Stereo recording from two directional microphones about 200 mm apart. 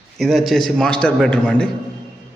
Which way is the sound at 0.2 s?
Centre (ahead or behind).